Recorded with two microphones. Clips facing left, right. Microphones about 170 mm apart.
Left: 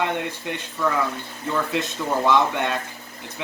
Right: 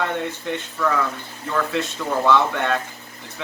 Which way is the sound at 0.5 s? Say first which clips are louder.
Right 2 dB; 15° left (ahead or behind).